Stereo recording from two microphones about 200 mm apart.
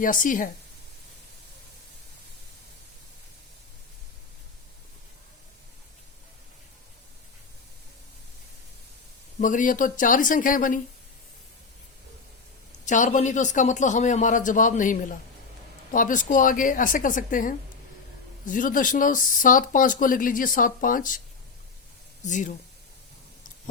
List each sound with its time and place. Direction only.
0.0 s speech: 40° left (ahead or behind)
9.4 s speech: 40° left (ahead or behind)
12.8 s speech: 40° left (ahead or behind)
22.2 s speech: 40° left (ahead or behind)